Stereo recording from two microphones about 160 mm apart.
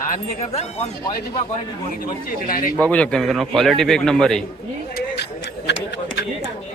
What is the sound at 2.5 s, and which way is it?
Speech, 60° left (ahead or behind).